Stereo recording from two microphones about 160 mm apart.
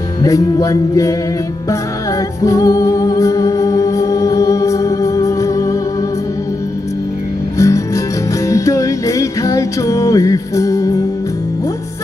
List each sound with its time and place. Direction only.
0.2 s music: 20° left (ahead or behind)
2.4 s music: 20° left (ahead or behind)
7.5 s music: 20° left (ahead or behind)